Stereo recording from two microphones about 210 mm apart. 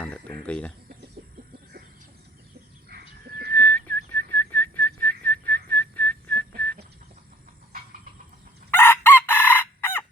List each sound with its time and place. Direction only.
0.0 s speech: 5° left (ahead or behind)
2.9 s bird: 45° right (ahead or behind)
3.5 s whistling: 10° left (ahead or behind)
8.7 s chicken: 10° left (ahead or behind)